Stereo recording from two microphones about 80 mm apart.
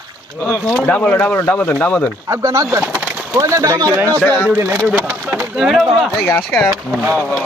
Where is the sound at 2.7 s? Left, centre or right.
Right.